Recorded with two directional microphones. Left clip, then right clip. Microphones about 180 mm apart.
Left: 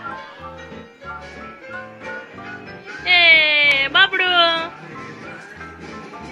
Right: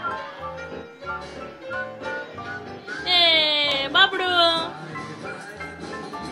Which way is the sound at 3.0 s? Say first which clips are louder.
Left 6 dB; centre (ahead or behind).